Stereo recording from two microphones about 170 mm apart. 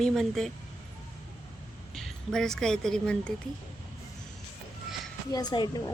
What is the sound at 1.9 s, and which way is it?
A woman's voice, centre (ahead or behind).